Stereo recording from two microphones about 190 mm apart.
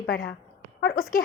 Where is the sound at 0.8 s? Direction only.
55° left (ahead or behind).